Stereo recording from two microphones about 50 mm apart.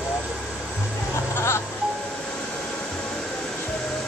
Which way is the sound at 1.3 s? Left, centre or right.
Left.